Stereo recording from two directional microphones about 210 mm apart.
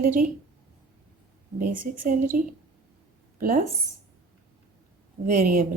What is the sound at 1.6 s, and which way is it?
Speech, 40° right (ahead or behind).